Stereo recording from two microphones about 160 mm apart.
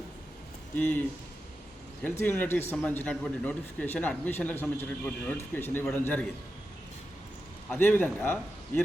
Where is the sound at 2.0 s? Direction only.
15° left (ahead or behind).